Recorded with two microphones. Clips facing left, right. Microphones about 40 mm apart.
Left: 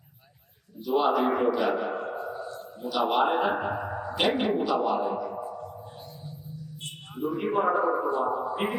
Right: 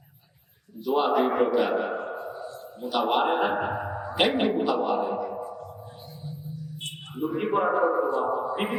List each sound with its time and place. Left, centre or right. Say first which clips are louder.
0.9 s a man's voice: right 1 dB; centre
1.9 s a sound: even; centre
3.1 s a man's voice: even; centre
5.5 s music: left 1 dB; centre
6.8 s a sound: right 1 dB; right
7.4 s a man's voice: right 1 dB; centre